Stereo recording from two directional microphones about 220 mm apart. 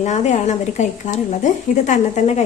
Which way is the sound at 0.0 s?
30° left (ahead or behind).